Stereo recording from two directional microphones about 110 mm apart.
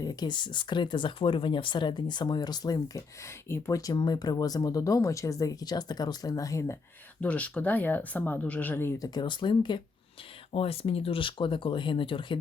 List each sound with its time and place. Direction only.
0.0 s speech: 35° left (ahead or behind)
7.2 s speech: 15° left (ahead or behind)
9.0 s speech: 40° left (ahead or behind)
10.5 s speech: 65° left (ahead or behind)